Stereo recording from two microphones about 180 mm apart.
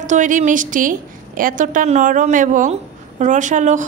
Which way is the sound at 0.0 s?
45° right (ahead or behind).